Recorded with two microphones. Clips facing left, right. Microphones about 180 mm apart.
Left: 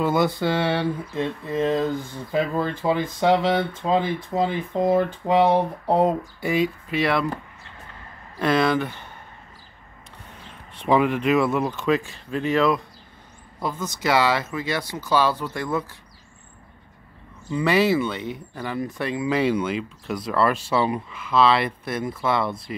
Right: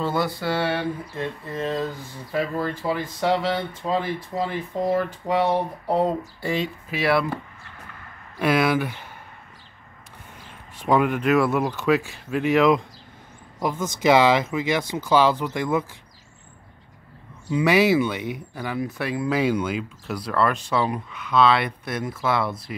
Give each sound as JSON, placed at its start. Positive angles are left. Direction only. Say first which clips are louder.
{"t": 0.0, "sound": "speech", "louder": "left 4 dB", "side_deg": 20}
{"t": 6.9, "sound": "speech", "louder": "right 5 dB", "side_deg": -5}
{"t": 8.4, "sound": "speech", "louder": "even", "side_deg": -5}
{"t": 10.9, "sound": "speech", "louder": "even", "side_deg": 0}
{"t": 17.5, "sound": "speech", "louder": "right 1 dB", "side_deg": -10}